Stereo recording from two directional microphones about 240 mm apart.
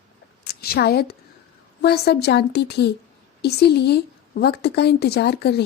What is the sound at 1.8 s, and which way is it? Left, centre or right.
A woman's voice, left.